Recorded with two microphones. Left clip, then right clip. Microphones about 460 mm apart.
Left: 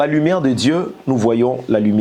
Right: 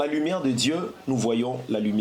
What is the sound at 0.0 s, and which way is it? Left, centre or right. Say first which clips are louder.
A man's voice: left 9 dB; left.